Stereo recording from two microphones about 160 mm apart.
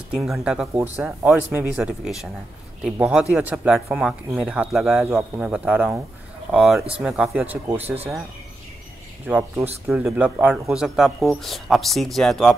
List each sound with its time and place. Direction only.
0.1 s speech: 5° right (ahead or behind)
5.0 s speech: 15° right (ahead or behind)
9.2 s speech: 10° right (ahead or behind)